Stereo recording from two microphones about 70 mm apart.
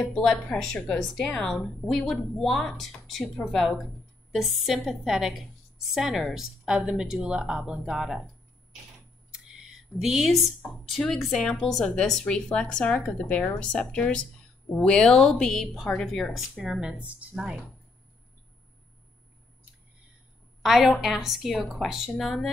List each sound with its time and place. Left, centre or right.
0.0 s a woman's voice: centre
4.3 s a woman's voice: centre
9.3 s a sound: centre
10.9 s a woman's voice: centre
20.6 s a woman's voice: centre